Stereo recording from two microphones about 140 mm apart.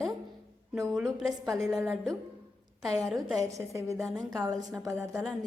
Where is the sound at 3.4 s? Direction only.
20° right (ahead or behind).